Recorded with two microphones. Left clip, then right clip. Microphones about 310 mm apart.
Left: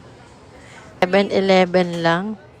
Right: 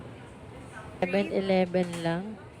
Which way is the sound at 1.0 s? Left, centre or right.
Left.